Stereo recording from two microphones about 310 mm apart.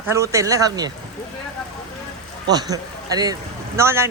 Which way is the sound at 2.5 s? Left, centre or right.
Centre.